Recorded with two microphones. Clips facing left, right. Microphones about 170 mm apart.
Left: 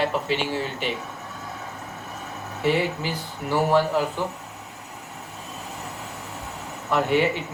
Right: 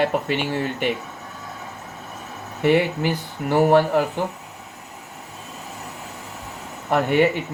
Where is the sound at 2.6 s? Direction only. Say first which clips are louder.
Right 5 dB; 60° right (ahead or behind).